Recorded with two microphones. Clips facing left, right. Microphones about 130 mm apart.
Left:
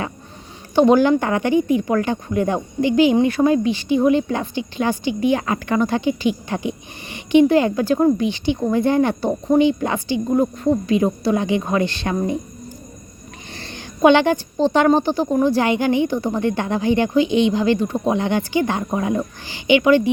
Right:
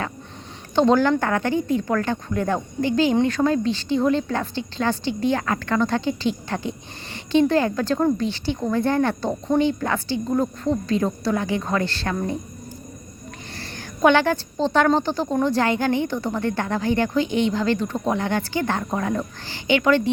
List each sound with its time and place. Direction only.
0.8 s speech: 15° left (ahead or behind)
13.6 s speech: 20° left (ahead or behind)